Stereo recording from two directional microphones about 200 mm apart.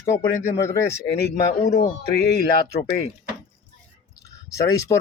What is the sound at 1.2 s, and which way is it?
Speech, 55° left (ahead or behind).